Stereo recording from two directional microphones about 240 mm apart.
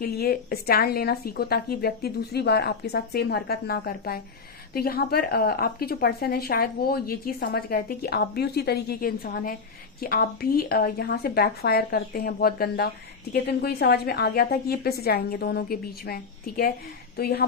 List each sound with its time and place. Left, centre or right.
0.0 s speech: left